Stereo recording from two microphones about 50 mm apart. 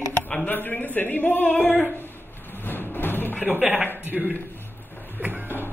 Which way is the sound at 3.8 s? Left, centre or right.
Right.